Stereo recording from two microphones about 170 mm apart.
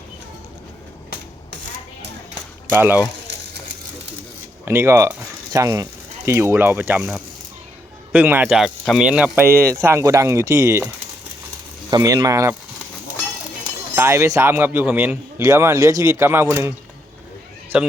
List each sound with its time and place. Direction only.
2.7 s speech: 10° right (ahead or behind)
4.6 s speech: 15° right (ahead or behind)
11.9 s speech: 20° right (ahead or behind)
13.9 s speech: 15° right (ahead or behind)
17.7 s speech: 5° right (ahead or behind)